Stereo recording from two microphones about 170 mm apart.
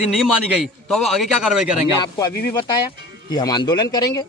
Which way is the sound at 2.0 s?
25° left (ahead or behind).